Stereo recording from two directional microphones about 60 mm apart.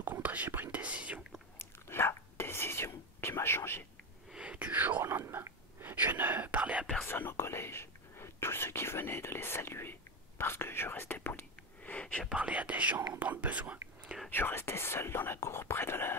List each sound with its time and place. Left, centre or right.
0.0 s whispering: right
1.6 s whispering: left
4.3 s whispering: centre
7.1 s whispering: left
12.4 s whispering: right
14.3 s whispering: left